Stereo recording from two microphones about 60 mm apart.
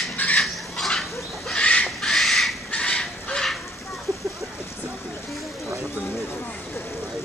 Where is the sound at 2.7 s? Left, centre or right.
Centre.